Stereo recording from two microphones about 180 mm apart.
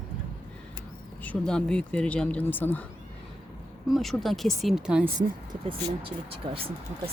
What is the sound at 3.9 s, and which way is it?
Speech, centre (ahead or behind).